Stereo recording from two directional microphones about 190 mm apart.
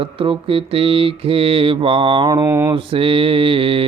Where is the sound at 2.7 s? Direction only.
30° right (ahead or behind).